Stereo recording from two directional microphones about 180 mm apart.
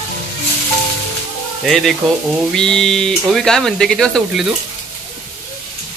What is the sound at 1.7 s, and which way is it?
Speech, centre (ahead or behind).